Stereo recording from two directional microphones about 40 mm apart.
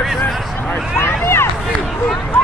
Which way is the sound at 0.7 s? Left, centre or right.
Left.